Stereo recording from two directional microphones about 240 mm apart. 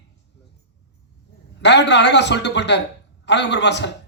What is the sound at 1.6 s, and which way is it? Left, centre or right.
Speech, left.